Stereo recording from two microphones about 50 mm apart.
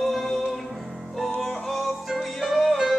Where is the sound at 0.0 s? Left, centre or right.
Centre.